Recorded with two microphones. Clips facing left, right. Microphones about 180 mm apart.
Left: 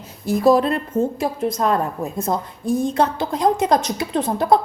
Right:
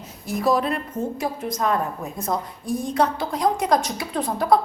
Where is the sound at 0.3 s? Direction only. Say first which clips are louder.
Left 6 dB; 30° left (ahead or behind).